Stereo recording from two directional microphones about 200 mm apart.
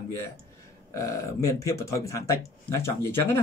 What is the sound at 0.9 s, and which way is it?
Speech, 15° left (ahead or behind).